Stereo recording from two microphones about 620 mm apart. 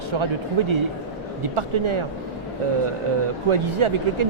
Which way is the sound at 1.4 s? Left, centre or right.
Right.